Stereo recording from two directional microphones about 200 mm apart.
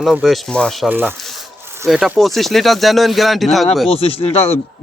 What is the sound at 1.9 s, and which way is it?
Speech, centre (ahead or behind).